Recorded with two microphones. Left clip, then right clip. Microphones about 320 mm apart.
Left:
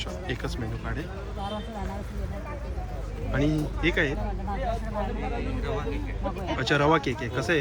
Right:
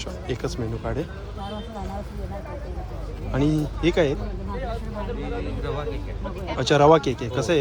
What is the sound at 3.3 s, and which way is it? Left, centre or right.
Speech, centre.